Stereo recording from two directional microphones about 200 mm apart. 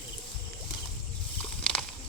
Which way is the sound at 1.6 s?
5° left (ahead or behind).